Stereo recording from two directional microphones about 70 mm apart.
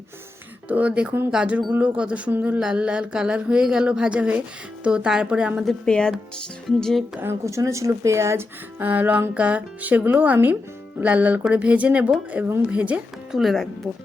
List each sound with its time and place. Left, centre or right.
0.7 s speech: centre
2.6 s speech: centre
5.6 s speech: centre
7.4 s speech: right
8.8 s speech: right
13.3 s speech: centre